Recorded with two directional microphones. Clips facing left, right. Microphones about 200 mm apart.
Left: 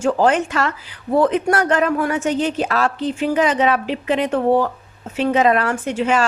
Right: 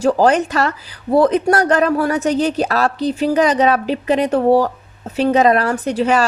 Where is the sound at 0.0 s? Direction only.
40° right (ahead or behind).